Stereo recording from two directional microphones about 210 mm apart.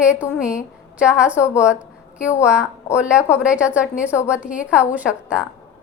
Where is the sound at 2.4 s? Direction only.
5° right (ahead or behind).